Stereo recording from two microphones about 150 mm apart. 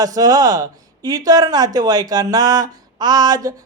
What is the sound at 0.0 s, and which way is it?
A man's voice, 25° right (ahead or behind).